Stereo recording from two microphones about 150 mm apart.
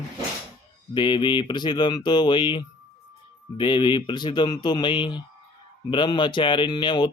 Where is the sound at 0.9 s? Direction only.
30° left (ahead or behind).